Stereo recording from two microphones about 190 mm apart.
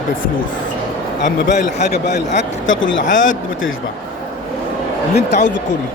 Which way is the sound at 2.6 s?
90° left.